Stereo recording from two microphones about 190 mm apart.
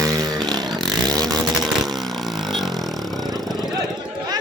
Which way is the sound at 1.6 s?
Centre (ahead or behind).